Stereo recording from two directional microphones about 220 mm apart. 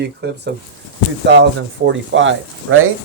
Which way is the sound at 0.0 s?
50° right (ahead or behind).